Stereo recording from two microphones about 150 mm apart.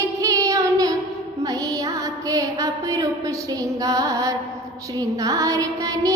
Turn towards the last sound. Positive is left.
turn(degrees=-20)  # may be behind; listen again after turning